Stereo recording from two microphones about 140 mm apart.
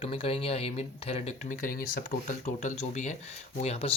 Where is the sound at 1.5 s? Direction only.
75° left (ahead or behind).